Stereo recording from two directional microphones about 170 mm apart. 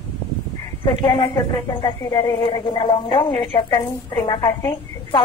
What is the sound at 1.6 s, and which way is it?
A woman's voice, 25° left (ahead or behind).